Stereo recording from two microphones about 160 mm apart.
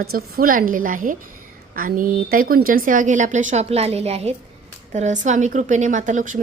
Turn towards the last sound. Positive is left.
turn(degrees=-50)  # may be behind; listen again after turning